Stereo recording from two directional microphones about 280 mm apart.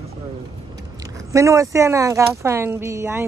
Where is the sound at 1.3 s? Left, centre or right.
Centre.